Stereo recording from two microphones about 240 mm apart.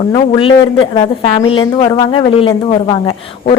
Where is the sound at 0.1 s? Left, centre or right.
Left.